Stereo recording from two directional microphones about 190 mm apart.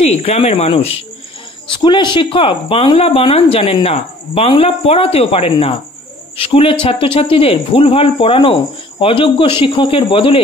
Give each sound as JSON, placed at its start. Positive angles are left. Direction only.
{"t": 0.2, "sound": "speech", "side_deg": 30}